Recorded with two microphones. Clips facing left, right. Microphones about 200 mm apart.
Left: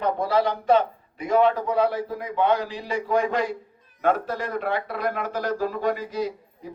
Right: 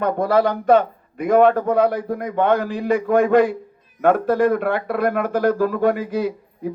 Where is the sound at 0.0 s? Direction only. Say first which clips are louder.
Right 5 dB; 50° right (ahead or behind).